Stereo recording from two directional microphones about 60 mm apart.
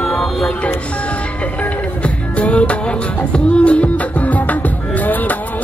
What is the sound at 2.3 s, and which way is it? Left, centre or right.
Music, left.